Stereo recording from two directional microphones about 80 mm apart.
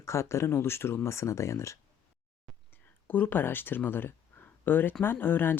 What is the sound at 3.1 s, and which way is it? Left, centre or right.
Speech, left.